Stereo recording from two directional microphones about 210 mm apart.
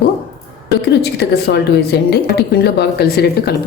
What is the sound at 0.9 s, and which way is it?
A woman's voice, 55° left (ahead or behind).